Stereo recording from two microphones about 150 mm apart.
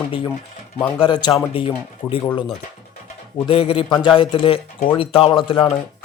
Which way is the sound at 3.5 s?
40° left (ahead or behind).